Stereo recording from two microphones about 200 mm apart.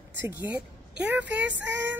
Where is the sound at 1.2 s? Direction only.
60° right (ahead or behind).